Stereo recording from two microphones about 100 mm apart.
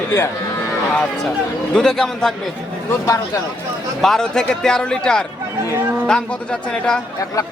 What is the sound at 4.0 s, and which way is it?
A man's voice, 5° left (ahead or behind).